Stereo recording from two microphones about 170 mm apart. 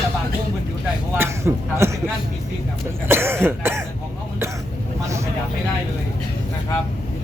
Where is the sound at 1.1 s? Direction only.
15° right (ahead or behind).